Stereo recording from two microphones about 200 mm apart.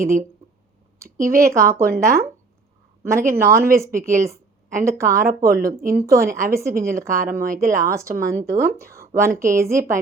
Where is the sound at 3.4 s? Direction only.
50° right (ahead or behind).